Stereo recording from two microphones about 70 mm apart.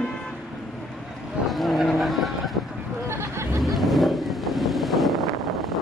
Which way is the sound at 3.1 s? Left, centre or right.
Right.